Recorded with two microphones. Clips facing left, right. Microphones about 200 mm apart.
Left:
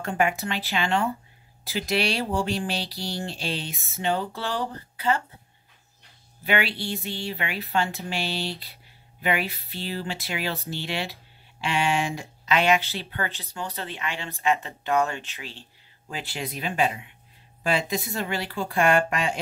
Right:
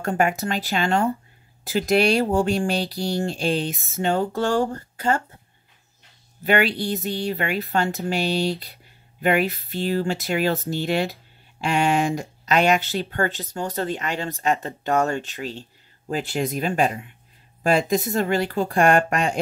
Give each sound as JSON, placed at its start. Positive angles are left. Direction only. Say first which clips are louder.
{"t": 0.0, "sound": "speech", "louder": "right 3 dB", "side_deg": -45}
{"t": 6.4, "sound": "speech", "louder": "right 6 dB", "side_deg": -45}